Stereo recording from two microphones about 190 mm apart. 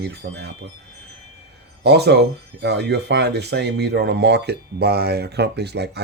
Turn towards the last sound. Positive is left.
turn(degrees=-60)  # may be behind; listen again after turning